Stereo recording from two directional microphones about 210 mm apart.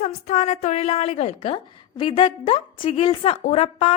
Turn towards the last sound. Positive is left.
turn(degrees=30)  # may be behind; listen again after turning